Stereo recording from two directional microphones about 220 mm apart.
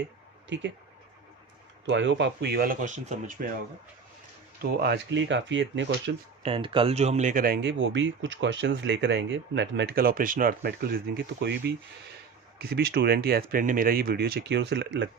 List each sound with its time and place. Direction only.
1.9 s speech: 55° right (ahead or behind); by 3.5 s 35° right (ahead or behind)
4.6 s speech: 45° right (ahead or behind)
6.4 s speech: 25° right (ahead or behind); by 15.1 s 55° right (ahead or behind)